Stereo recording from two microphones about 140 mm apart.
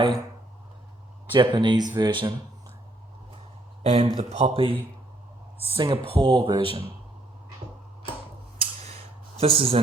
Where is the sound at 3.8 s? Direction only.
45° right (ahead or behind).